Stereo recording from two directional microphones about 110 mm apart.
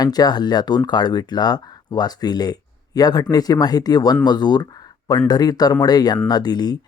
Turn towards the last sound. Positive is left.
turn(degrees=40)  # may be behind; listen again after turning